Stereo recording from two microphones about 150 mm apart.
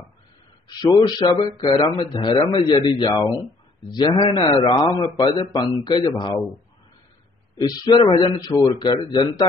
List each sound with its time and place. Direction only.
0.7 s a man's voice: 30° left (ahead or behind)
7.5 s a man's voice: 25° left (ahead or behind)